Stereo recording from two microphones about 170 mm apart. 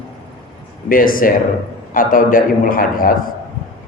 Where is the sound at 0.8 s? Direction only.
55° left (ahead or behind).